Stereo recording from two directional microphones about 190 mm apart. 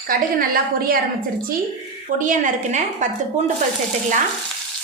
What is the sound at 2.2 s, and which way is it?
Speech, 40° right (ahead or behind).